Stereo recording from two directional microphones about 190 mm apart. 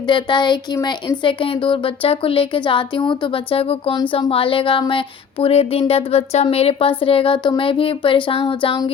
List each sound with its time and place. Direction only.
0.0 s speech: 25° left (ahead or behind)